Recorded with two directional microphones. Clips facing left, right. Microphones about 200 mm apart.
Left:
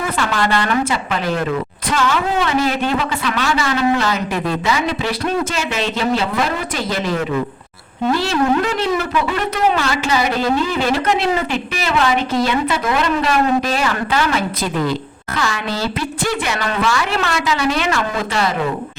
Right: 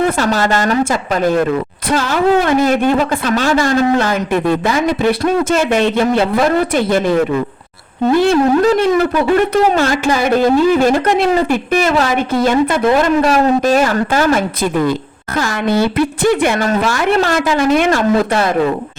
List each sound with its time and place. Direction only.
0.2 s speech: 40° right (ahead or behind)
8.1 s speech: 55° right (ahead or behind)